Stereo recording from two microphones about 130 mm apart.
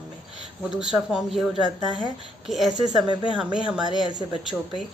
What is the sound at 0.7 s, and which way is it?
Speech, 5° right (ahead or behind).